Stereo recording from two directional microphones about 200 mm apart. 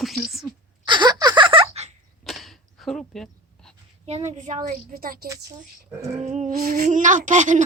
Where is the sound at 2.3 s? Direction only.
Centre (ahead or behind).